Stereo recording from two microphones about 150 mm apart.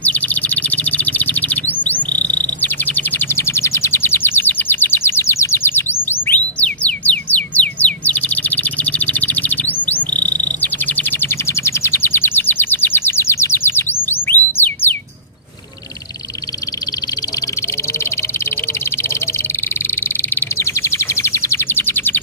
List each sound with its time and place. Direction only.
0.0 s chirp: 10° left (ahead or behind)
10.6 s bird: 10° left (ahead or behind)
20.0 s bird: 15° left (ahead or behind)